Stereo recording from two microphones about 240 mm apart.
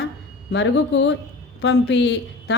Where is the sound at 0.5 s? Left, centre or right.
Left.